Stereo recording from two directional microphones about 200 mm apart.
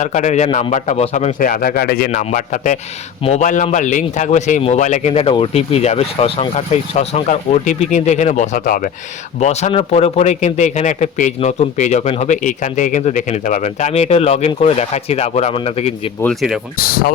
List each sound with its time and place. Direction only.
0.0 s a man's voice: 35° left (ahead or behind)
9.4 s a man's voice: 35° left (ahead or behind)
16.2 s speech: centre (ahead or behind)
16.7 s speech: 45° left (ahead or behind)